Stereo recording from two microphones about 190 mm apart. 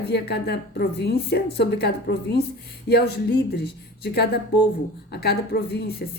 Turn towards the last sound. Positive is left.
turn(degrees=60)  # may be behind; listen again after turning